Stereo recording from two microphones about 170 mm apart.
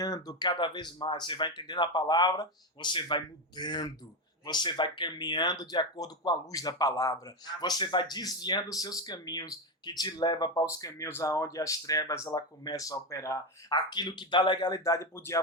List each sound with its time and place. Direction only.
0.0 s speech: 20° left (ahead or behind)